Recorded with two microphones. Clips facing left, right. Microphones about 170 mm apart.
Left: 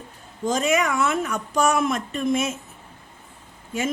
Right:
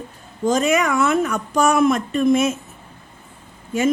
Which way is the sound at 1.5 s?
55° right (ahead or behind).